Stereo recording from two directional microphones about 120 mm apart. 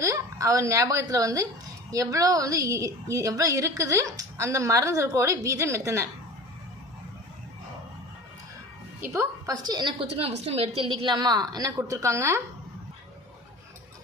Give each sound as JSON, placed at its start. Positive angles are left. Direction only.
{"t": 0.0, "sound": "a woman's voice", "side_deg": -25}
{"t": 9.0, "sound": "a woman's voice", "side_deg": -20}
{"t": 9.6, "sound": "a woman's voice", "side_deg": -35}
{"t": 10.0, "sound": "a woman's voice", "side_deg": -55}